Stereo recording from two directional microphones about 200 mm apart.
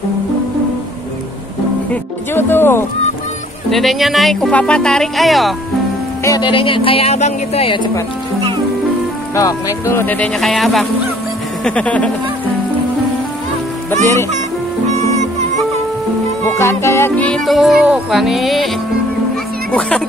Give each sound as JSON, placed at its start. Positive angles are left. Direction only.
{"t": 2.3, "sound": "speech", "side_deg": 10}
{"t": 3.7, "sound": "music", "side_deg": 0}
{"t": 6.2, "sound": "speech", "side_deg": 20}
{"t": 9.3, "sound": "speech", "side_deg": 15}
{"t": 11.6, "sound": "music", "side_deg": 5}
{"t": 16.4, "sound": "music", "side_deg": 10}